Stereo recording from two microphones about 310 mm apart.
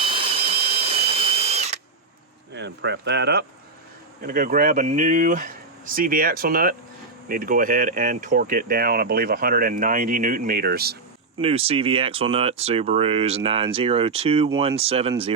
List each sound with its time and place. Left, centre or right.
0.0 s drill: centre
2.5 s speech: right
11.3 s speech: centre